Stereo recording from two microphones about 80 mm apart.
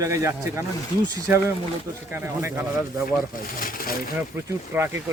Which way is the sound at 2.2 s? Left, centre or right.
Right.